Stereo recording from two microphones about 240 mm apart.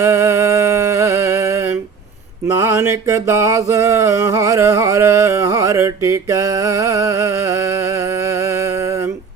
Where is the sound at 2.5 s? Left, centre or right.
Centre.